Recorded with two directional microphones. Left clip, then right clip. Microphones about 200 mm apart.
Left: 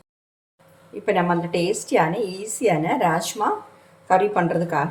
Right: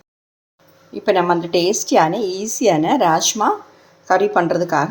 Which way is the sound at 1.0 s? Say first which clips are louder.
Right 5 dB; 35° right (ahead or behind).